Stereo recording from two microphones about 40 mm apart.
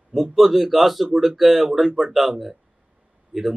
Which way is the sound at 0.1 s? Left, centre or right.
Centre.